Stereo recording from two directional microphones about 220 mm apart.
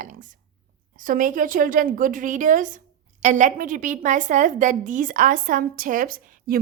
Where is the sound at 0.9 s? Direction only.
40° right (ahead or behind).